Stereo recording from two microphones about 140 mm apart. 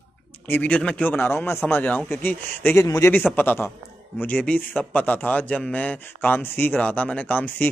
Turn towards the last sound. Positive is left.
turn(degrees=10)  # may be behind; listen again after turning